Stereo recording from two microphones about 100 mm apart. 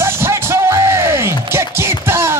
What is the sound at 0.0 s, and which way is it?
Music, 25° right (ahead or behind).